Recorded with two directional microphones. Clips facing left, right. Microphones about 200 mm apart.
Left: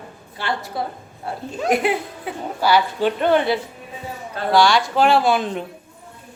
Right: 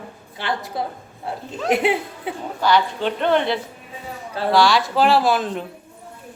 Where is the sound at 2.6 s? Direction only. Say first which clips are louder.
Left 1 dB; 5° left (ahead or behind).